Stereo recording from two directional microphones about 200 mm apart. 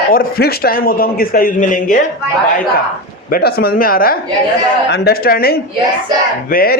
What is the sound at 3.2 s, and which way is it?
A man's voice, 50° left (ahead or behind).